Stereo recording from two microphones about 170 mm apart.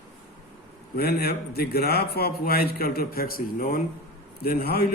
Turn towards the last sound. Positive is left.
turn(degrees=65)  # may be behind; listen again after turning